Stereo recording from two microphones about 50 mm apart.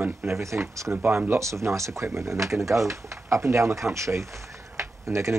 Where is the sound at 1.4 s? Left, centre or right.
Right.